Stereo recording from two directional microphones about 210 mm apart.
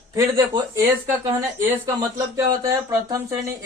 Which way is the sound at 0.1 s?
15° right (ahead or behind).